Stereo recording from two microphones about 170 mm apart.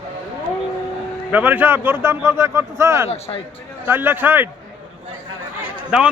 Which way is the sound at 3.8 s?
10° right (ahead or behind).